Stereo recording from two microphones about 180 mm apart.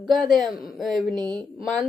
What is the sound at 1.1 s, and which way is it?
Speech, 20° right (ahead or behind).